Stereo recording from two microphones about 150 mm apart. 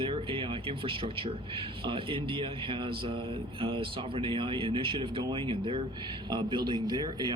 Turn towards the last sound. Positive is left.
turn(degrees=-25)  # may be behind; listen again after turning